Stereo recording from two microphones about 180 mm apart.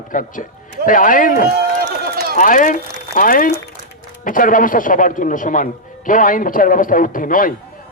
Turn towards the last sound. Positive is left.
turn(degrees=50)  # may be behind; listen again after turning